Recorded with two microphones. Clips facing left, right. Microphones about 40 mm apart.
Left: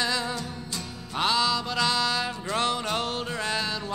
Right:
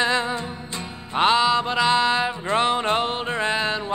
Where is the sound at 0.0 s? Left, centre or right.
Right.